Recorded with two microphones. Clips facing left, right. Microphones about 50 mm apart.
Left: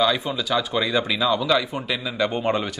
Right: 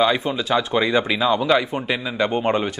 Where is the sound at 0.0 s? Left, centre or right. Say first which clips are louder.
Right 2 dB; right.